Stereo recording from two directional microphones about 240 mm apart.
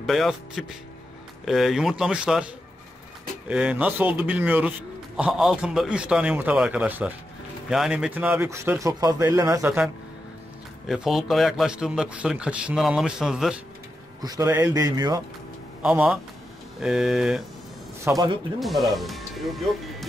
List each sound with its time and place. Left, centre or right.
0.0 s a man's voice: centre
10.9 s a man's voice: centre
14.2 s speech: centre
15.8 s a man's voice: centre
18.0 s speech: centre
18.6 s speech: centre